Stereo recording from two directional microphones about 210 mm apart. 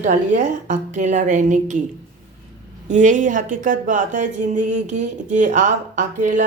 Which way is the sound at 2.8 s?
35° right (ahead or behind).